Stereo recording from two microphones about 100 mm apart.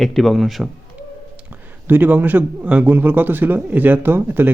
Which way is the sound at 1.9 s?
20° right (ahead or behind).